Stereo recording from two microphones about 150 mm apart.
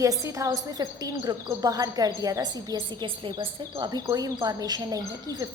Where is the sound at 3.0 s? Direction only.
35° right (ahead or behind).